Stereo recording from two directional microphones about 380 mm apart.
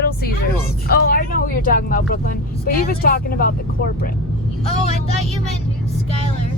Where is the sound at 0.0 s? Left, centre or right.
Left.